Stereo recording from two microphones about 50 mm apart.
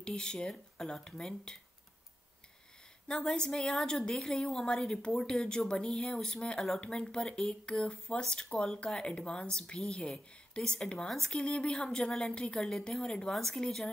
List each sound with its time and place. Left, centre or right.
0.0 s speech: centre
3.1 s speech: centre
11.1 s speech: centre
11.3 s speech: centre